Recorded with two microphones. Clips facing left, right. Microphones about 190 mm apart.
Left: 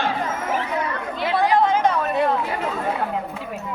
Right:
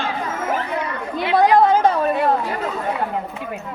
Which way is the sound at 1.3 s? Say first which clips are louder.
Right 5 dB; 40° right (ahead or behind).